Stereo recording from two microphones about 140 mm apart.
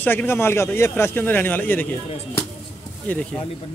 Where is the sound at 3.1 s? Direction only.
10° left (ahead or behind).